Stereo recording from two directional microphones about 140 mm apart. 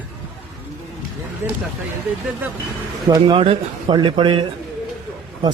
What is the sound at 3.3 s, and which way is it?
Speech, 40° right (ahead or behind).